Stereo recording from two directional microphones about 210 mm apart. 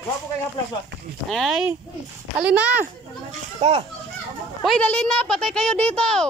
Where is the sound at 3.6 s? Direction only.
30° right (ahead or behind).